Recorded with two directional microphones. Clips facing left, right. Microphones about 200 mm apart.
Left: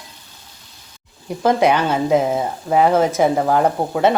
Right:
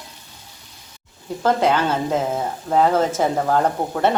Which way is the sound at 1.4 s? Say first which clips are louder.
Left 3 dB; 15° left (ahead or behind).